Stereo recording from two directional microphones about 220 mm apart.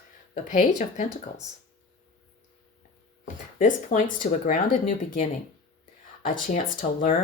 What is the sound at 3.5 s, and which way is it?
Speech, 35° left (ahead or behind).